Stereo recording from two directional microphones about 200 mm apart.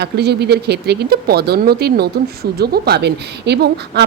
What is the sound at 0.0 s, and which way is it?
A woman's voice, 55° right (ahead or behind).